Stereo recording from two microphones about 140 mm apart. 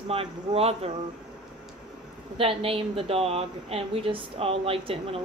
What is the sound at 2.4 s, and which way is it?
A woman's voice, 45° right (ahead or behind).